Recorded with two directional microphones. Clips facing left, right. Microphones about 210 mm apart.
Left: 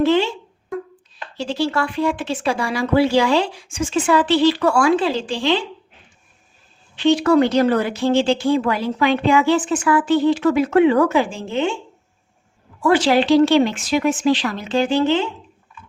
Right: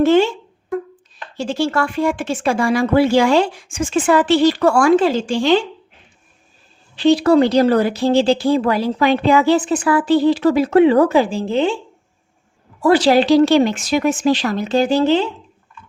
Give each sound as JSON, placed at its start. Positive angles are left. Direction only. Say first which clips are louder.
{"t": 0.0, "sound": "speech", "louder": "right 4 dB", "side_deg": -45}
{"t": 1.4, "sound": "speech", "louder": "right 2 dB", "side_deg": -45}
{"t": 6.9, "sound": "speech", "louder": "right 2 dB", "side_deg": -35}
{"t": 12.8, "sound": "speech", "louder": "right 3 dB", "side_deg": -40}